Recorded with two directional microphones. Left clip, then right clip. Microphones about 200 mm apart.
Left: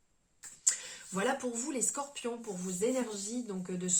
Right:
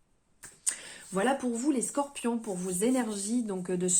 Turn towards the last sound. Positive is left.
turn(degrees=-50)  # may be behind; listen again after turning